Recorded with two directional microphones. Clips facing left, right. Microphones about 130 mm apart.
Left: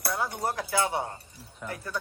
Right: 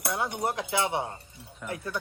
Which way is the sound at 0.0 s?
20° right (ahead or behind).